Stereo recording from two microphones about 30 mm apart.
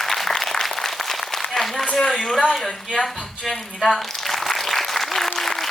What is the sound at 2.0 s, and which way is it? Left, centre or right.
Speech, centre.